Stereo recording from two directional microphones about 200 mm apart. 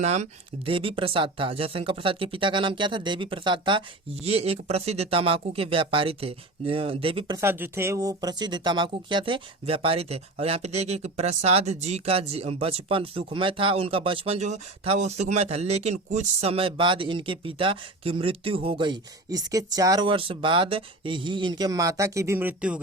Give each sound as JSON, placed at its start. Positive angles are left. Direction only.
{"t": 0.0, "sound": "speech", "side_deg": -35}